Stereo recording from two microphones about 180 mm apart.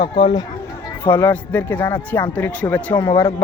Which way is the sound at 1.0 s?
10° left (ahead or behind).